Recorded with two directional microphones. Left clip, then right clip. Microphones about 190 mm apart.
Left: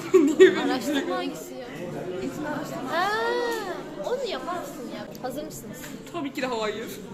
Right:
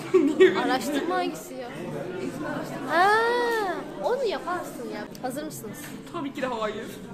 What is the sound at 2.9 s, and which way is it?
Music, 40° right (ahead or behind).